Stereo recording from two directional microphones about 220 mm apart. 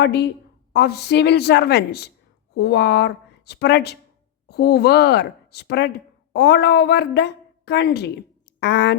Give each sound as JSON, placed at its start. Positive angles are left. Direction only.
{"t": 0.0, "sound": "a woman's voice", "side_deg": 50}